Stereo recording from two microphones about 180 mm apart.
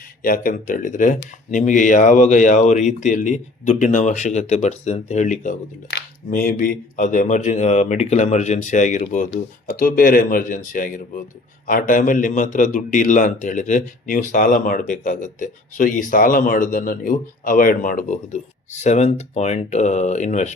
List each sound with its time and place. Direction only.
0.2 s speech: 50° left (ahead or behind)